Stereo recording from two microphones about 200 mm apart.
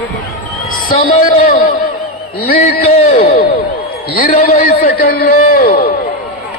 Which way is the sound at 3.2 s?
55° left (ahead or behind).